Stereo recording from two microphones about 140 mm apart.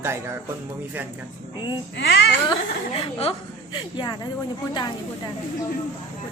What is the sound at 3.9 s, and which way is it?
Speech, 30° left (ahead or behind).